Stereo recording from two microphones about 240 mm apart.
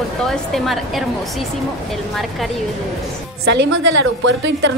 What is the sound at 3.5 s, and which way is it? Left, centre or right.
A woman's voice, right.